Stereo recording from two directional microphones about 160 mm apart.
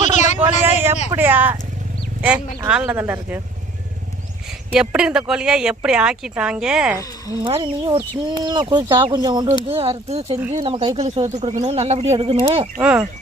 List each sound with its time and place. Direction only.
0.0 s a sound: 50° left (ahead or behind)
0.4 s vehicle: 15° right (ahead or behind)
1.1 s speech: 10° right (ahead or behind)
4.4 s a woman's voice: 5° right (ahead or behind)
7.4 s speech: 30° right (ahead or behind)
9.6 s speech: 40° right (ahead or behind)
12.8 s speech: 10° right (ahead or behind)